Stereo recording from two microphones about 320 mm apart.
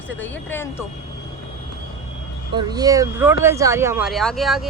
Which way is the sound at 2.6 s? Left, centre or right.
Centre.